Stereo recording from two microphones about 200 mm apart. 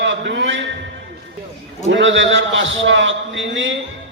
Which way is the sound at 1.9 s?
70° right (ahead or behind).